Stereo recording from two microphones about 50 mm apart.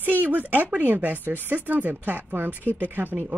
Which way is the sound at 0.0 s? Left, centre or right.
Right.